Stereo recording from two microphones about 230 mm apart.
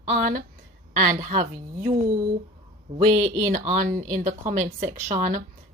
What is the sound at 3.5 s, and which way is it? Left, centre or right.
Speech, right.